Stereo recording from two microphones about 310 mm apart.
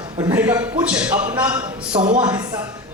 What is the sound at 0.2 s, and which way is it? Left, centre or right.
A man's voice, centre.